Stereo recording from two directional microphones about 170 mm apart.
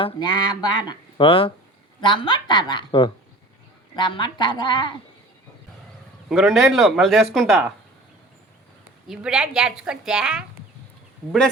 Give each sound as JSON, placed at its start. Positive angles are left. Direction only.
{"t": 0.0, "sound": "speech", "side_deg": 25}
{"t": 6.2, "sound": "speech", "side_deg": 0}
{"t": 9.0, "sound": "speech", "side_deg": -5}